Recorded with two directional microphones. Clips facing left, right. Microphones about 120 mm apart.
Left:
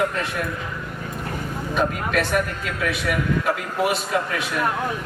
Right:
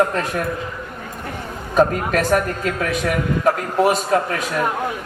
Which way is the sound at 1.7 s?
40° right (ahead or behind).